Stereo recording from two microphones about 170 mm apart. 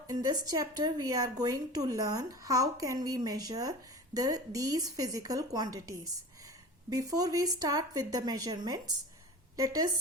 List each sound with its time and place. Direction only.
0.1 s speech: 20° right (ahead or behind)